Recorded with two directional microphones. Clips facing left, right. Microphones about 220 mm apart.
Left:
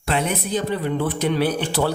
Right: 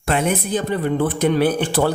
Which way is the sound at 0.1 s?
50° right (ahead or behind).